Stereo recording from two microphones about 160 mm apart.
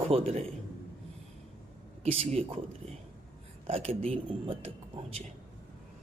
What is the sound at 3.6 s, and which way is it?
Speech, 40° right (ahead or behind).